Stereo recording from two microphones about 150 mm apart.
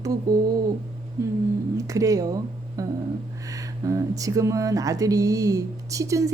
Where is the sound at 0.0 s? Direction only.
25° right (ahead or behind).